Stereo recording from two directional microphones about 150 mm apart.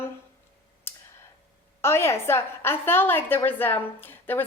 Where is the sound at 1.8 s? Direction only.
15° left (ahead or behind).